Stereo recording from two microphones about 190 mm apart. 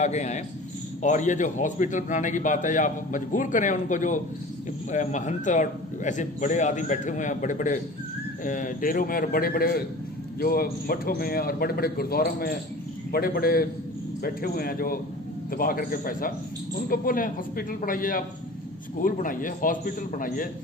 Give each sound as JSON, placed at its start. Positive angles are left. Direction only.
{"t": 0.0, "sound": "a man's voice", "side_deg": 35}